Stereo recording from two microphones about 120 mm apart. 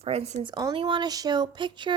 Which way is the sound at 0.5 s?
40° right (ahead or behind).